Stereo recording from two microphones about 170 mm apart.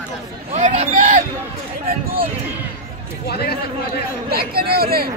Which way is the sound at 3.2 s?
70° left (ahead or behind).